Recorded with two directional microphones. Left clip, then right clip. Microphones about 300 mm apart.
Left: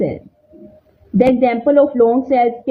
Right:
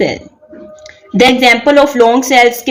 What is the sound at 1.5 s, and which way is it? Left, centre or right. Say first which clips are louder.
A woman's voice: right 5 dB; centre.